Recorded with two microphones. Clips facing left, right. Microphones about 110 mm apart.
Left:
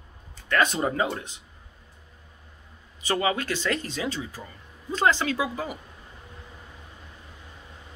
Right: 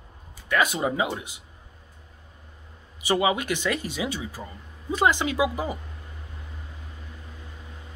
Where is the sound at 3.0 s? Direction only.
15° right (ahead or behind).